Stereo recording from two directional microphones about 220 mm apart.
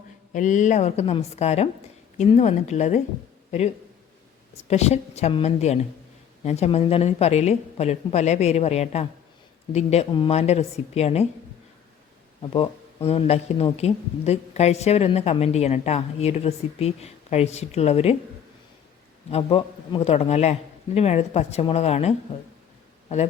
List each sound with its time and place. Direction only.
0.3 s speech: 35° left (ahead or behind)
4.7 s speech: 30° left (ahead or behind)
12.4 s speech: 25° left (ahead or behind)
19.3 s speech: 25° left (ahead or behind)